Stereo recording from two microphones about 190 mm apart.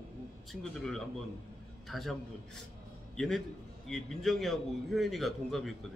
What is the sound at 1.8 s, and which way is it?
Speech, centre (ahead or behind).